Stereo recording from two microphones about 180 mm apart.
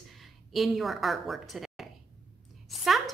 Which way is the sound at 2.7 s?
Centre (ahead or behind).